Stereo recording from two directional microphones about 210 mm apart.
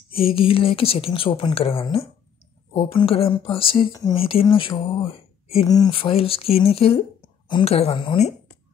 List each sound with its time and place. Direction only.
0.1 s speech: 25° left (ahead or behind)